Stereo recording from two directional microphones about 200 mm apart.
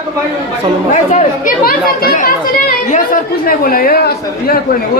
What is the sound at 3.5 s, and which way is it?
Speech, 45° left (ahead or behind).